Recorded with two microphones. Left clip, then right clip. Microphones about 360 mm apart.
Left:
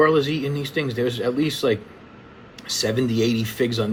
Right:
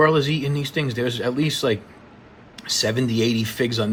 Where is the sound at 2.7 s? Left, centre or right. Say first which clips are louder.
Even; right.